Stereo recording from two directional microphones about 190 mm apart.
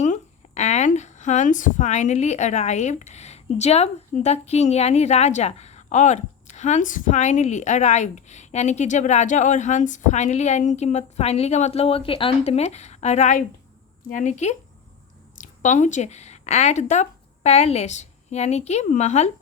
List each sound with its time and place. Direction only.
0.0 s speech: 35° left (ahead or behind)